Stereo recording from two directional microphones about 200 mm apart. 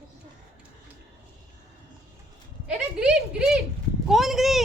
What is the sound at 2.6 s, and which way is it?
Speech, 5° right (ahead or behind).